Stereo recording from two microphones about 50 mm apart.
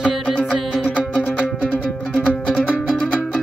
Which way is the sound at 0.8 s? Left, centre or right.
Left.